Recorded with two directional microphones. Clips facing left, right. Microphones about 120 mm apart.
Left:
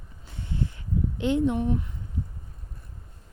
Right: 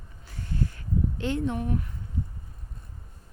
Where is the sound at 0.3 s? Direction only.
20° left (ahead or behind).